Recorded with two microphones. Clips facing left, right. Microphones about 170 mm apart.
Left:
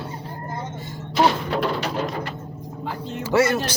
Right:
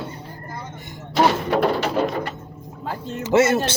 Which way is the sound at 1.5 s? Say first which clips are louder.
Right 4 dB; 60° right (ahead or behind).